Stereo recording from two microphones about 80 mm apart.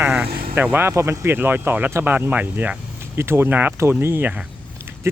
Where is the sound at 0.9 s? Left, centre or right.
Right.